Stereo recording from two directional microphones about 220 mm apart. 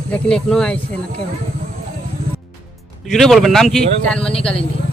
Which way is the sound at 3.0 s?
Centre (ahead or behind).